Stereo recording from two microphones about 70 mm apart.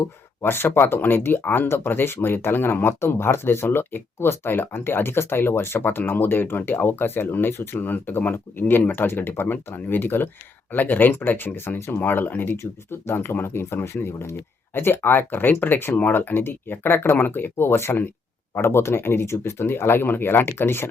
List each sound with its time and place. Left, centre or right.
0.0 s speech: left